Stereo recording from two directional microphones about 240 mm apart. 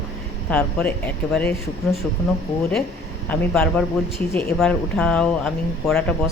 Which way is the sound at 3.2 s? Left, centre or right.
Centre.